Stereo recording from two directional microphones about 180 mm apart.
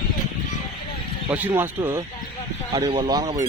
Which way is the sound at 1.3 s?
10° right (ahead or behind).